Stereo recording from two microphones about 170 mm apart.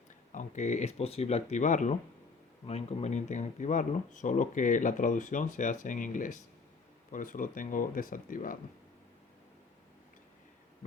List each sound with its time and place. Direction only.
0.3 s speech: 45° left (ahead or behind)